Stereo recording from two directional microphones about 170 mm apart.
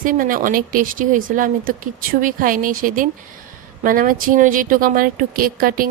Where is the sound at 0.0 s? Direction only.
50° right (ahead or behind).